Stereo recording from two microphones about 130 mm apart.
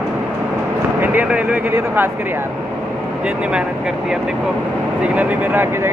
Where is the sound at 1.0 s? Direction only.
15° right (ahead or behind).